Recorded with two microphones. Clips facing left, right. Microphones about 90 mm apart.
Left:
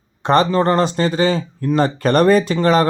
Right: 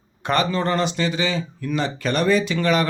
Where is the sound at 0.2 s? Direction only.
35° left (ahead or behind).